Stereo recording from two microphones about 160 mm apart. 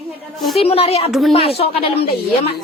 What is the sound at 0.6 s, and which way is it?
A woman's voice, 40° left (ahead or behind).